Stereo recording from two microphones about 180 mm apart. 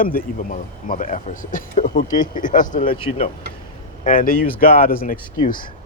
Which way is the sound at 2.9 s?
30° left (ahead or behind).